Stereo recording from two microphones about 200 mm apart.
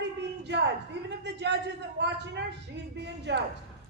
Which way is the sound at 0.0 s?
60° right (ahead or behind).